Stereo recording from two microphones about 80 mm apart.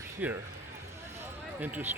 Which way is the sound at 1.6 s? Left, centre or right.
Right.